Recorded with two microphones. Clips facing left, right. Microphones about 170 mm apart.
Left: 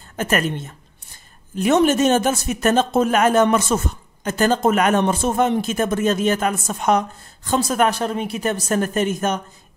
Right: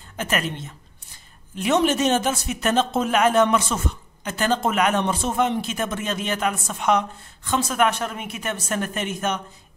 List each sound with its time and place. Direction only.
0.2 s speech: 45° left (ahead or behind)